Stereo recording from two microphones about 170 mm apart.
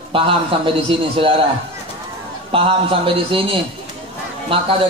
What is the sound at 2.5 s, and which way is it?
A man's voice, 30° right (ahead or behind).